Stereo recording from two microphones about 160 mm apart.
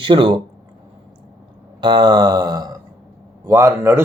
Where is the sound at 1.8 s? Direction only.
30° right (ahead or behind).